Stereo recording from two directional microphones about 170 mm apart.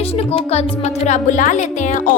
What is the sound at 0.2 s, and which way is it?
Speech, 35° left (ahead or behind).